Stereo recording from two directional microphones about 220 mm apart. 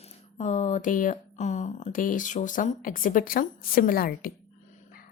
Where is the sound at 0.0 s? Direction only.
30° left (ahead or behind).